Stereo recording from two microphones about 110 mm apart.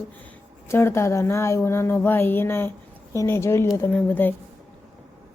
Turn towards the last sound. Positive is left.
turn(degrees=15)  # may be behind; listen again after turning